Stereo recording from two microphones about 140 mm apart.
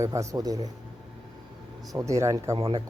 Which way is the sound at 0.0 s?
20° right (ahead or behind).